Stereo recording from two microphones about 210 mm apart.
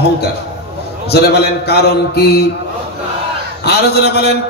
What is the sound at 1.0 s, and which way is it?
Speech, 50° left (ahead or behind).